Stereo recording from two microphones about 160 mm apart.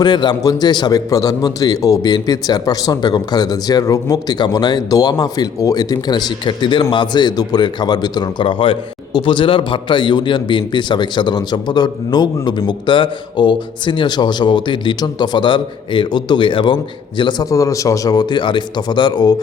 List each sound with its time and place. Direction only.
0.0 s a man's voice: 25° left (ahead or behind)